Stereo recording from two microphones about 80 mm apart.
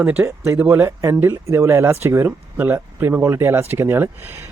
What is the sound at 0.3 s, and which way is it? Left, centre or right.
Speech, right.